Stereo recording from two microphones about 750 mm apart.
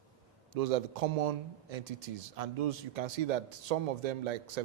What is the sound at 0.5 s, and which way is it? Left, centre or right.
Speech, right.